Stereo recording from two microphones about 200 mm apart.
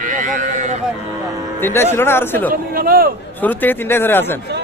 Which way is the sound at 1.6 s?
10° left (ahead or behind).